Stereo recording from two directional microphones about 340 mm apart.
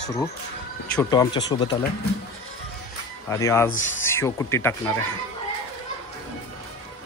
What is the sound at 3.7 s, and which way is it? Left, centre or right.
Speech, left.